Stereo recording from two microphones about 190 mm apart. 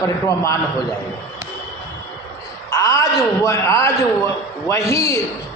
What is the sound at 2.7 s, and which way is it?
A man's voice, 15° left (ahead or behind).